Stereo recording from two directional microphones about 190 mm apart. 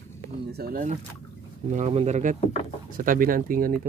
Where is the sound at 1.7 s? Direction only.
35° right (ahead or behind).